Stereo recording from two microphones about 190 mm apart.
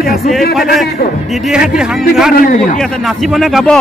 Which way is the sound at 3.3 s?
Centre (ahead or behind).